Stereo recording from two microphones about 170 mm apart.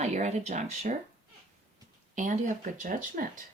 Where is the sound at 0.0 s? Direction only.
45° right (ahead or behind).